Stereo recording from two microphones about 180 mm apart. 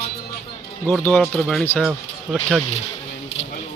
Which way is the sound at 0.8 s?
10° left (ahead or behind).